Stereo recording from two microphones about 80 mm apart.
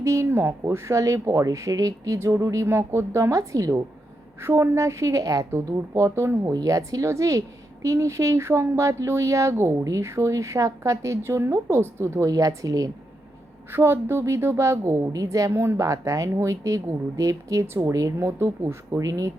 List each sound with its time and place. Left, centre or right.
0.0 s a woman's voice: right
4.4 s a woman's voice: right
6.5 s a woman's voice: right
12.3 s speech: right
13.7 s a woman's voice: right